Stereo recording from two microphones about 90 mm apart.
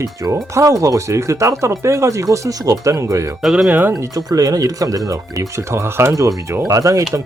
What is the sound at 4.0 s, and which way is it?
Speech, 45° right (ahead or behind).